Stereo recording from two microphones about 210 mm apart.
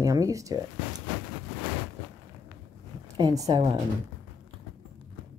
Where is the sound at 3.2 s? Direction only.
15° right (ahead or behind).